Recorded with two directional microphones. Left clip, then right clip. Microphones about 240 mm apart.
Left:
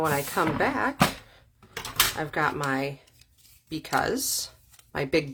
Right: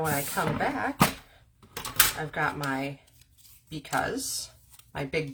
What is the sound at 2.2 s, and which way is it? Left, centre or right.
Speech, left.